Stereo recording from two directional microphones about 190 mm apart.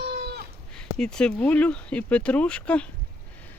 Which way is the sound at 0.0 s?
60° right (ahead or behind).